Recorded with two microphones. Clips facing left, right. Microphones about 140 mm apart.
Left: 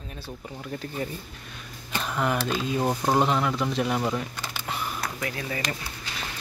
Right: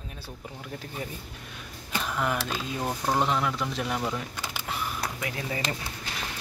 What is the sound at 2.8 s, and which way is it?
Speech, 25° left (ahead or behind).